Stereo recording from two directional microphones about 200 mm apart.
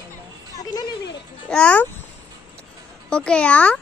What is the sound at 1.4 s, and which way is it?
Speech, 5° left (ahead or behind).